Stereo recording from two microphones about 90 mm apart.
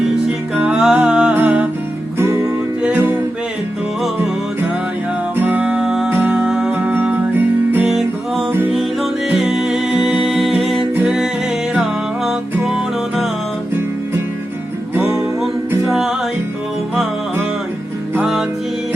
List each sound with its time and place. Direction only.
0.3 s music: 10° right (ahead or behind)
1.3 s music: 20° right (ahead or behind)
2.1 s music: 30° right (ahead or behind)
2.8 s music: 20° right (ahead or behind)
5.4 s music: 20° right (ahead or behind)
6.1 s music: 20° right (ahead or behind)
8.7 s music: centre (ahead or behind)
14.9 s music: 25° right (ahead or behind)
15.9 s music: 5° right (ahead or behind)